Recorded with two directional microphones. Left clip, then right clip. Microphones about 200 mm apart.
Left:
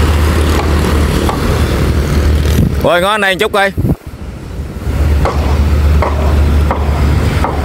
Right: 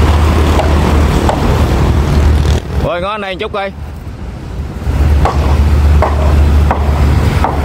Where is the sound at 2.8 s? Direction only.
35° left (ahead or behind).